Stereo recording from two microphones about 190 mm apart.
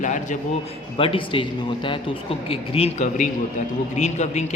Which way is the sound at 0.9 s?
30° left (ahead or behind).